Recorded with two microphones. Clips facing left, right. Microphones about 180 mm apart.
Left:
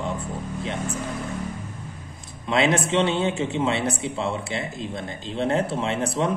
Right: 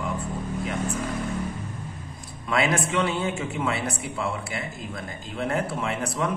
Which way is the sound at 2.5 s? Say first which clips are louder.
Left 3 dB; 25° left (ahead or behind).